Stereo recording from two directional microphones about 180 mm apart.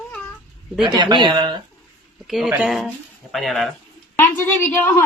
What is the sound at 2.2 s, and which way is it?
Speech, centre (ahead or behind).